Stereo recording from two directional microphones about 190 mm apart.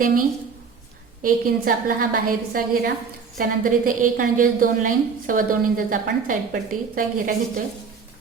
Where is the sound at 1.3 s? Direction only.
50° right (ahead or behind).